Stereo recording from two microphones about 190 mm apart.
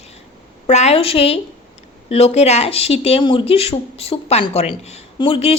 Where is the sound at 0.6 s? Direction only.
35° left (ahead or behind).